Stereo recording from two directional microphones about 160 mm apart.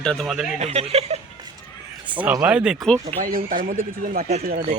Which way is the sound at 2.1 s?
10° right (ahead or behind).